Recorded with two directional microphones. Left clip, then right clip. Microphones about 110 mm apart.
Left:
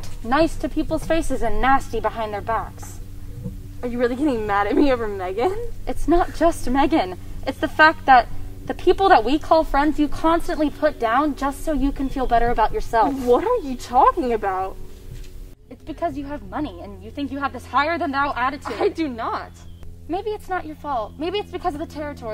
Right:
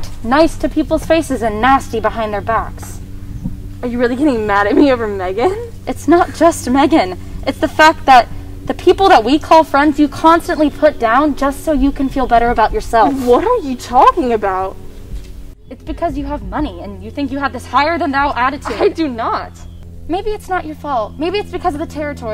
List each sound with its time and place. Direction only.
0.3 s a woman's voice: 30° right (ahead or behind)
3.8 s a woman's voice: centre (ahead or behind)
5.9 s a woman's voice: 25° right (ahead or behind)
13.3 s a woman's voice: centre (ahead or behind)
15.9 s a woman's voice: 25° right (ahead or behind)
18.6 s a woman's voice: 5° left (ahead or behind)
20.1 s speech: 15° right (ahead or behind)